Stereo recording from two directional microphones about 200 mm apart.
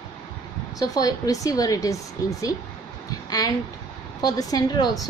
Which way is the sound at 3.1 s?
20° left (ahead or behind).